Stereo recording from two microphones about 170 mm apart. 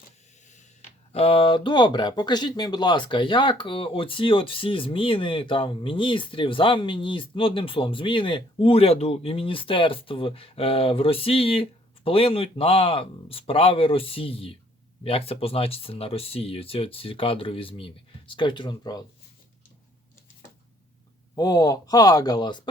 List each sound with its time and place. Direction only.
0.5 s speech: 40° left (ahead or behind)
21.3 s speech: 25° left (ahead or behind)